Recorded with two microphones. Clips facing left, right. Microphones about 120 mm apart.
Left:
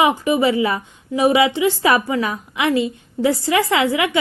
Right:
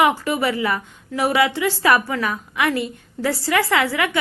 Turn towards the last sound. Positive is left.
turn(degrees=20)  # may be behind; listen again after turning